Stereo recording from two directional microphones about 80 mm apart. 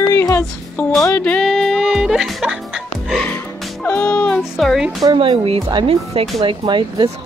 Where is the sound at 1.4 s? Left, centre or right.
Centre.